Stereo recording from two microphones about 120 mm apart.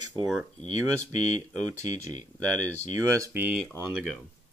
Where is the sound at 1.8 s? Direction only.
75° left (ahead or behind).